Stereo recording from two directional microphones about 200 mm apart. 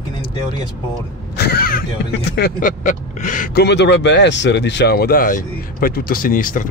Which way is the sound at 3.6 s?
60° left (ahead or behind).